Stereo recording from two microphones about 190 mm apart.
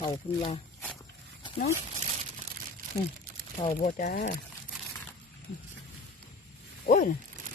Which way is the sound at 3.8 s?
45° left (ahead or behind).